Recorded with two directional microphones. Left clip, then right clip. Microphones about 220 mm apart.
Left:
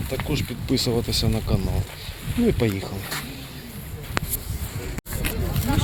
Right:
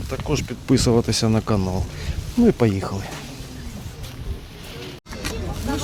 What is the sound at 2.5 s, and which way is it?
Speech, 30° right (ahead or behind).